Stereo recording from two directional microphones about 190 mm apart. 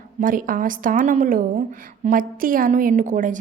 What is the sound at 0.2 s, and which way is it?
A woman's voice, 45° right (ahead or behind).